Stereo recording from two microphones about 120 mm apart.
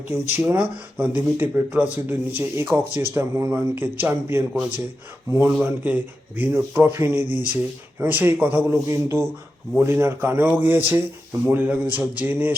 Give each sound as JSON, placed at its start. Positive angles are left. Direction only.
{"t": 0.1, "sound": "a man's voice", "side_deg": -20}